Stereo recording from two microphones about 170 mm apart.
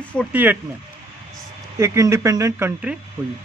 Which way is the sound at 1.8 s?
15° right (ahead or behind).